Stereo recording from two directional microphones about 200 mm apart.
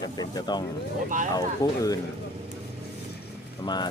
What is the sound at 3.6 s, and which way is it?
Speech, 20° left (ahead or behind).